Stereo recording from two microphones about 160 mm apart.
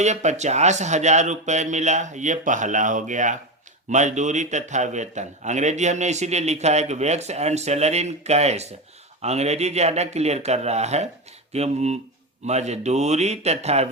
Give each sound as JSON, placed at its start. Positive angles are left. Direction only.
{"t": 0.0, "sound": "a man's voice", "side_deg": -45}